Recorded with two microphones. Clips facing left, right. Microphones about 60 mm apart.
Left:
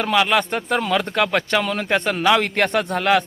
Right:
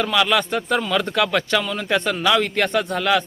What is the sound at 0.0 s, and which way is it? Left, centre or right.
A man's voice, left.